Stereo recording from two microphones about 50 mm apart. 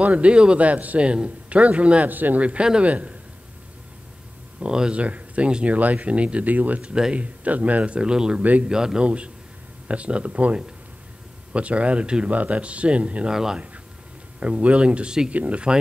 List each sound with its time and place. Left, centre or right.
0.0 s speech: right
2.0 s speech: right
2.4 s speech: centre
4.6 s speech: centre
5.0 s speech: right
7.4 s speech: right
8.4 s speech: right
8.6 s speech: centre
13.3 s speech: centre
14.4 s speech: right